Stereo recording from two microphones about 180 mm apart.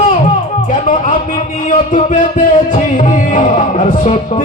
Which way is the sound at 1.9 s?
45° left (ahead or behind).